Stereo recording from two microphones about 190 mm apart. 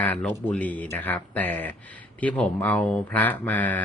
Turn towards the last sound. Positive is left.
turn(degrees=10)  # may be behind; listen again after turning